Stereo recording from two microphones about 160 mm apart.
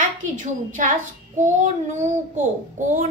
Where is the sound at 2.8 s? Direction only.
55° right (ahead or behind).